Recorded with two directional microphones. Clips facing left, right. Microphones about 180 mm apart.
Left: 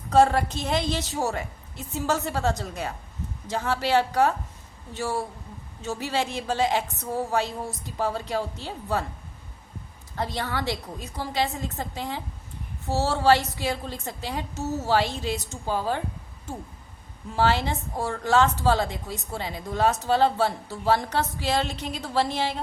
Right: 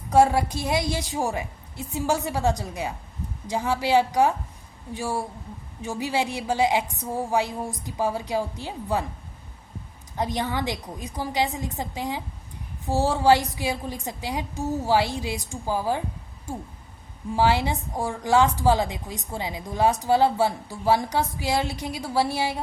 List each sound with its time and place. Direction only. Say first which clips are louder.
0.1 s a woman's voice: right 1 dB; 10° right (ahead or behind)
10.2 s a woman's voice: right 3 dB; 15° right (ahead or behind)
17.3 s a woman's voice: right 2 dB; 15° right (ahead or behind)